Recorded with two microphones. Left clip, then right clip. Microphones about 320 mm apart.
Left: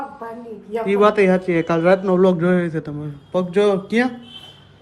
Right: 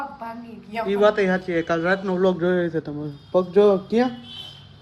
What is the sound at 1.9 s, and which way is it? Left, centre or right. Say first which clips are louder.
A man's voice: left 5 dB; left.